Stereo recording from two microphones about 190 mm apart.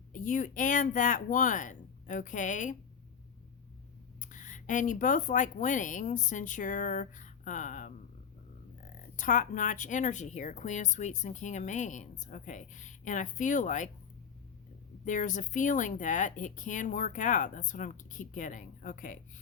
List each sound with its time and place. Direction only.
0.1 s speech: 45° left (ahead or behind)
4.2 s speech: 40° left (ahead or behind)
9.1 s a woman's voice: 45° left (ahead or behind)
15.0 s speech: 45° left (ahead or behind)